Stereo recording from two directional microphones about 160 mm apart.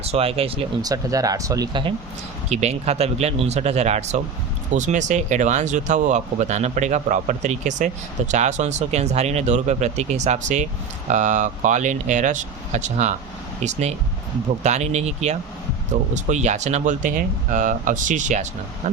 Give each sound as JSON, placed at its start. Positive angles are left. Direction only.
{"t": 0.0, "sound": "speech", "side_deg": -40}
{"t": 0.8, "sound": "speech", "side_deg": -25}
{"t": 2.5, "sound": "speech", "side_deg": -40}